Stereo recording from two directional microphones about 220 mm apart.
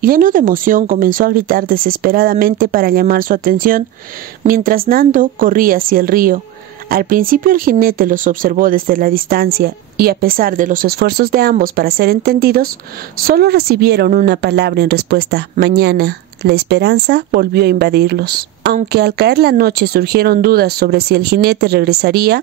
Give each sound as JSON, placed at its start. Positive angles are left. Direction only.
{"t": 0.0, "sound": "a woman's voice", "side_deg": -40}